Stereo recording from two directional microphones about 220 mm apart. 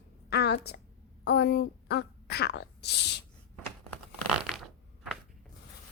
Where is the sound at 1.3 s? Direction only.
50° left (ahead or behind).